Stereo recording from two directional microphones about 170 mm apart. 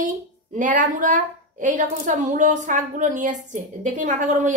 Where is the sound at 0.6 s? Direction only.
50° right (ahead or behind).